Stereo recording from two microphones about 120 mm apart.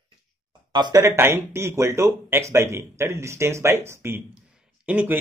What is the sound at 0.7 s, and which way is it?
Speech, 40° right (ahead or behind).